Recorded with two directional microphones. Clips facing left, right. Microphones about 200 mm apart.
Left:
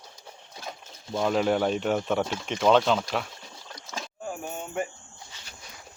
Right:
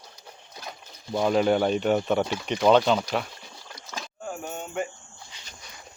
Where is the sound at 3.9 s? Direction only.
Centre (ahead or behind).